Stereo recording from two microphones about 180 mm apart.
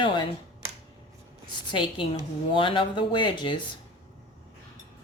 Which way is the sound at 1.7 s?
25° left (ahead or behind).